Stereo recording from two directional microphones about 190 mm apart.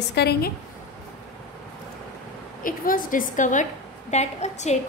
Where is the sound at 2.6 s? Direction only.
45° left (ahead or behind).